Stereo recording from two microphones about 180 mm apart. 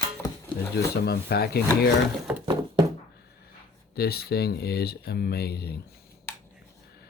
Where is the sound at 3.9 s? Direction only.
60° left (ahead or behind).